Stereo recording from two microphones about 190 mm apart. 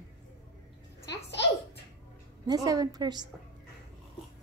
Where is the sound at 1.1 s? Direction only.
65° left (ahead or behind).